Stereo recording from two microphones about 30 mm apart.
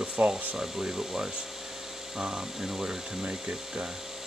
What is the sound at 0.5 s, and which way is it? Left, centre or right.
Rub, centre.